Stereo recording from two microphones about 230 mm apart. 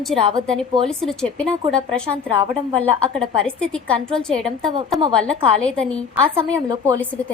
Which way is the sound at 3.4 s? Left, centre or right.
Centre.